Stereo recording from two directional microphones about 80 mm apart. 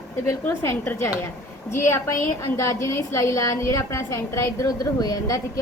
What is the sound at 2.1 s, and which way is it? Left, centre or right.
A woman's voice, left.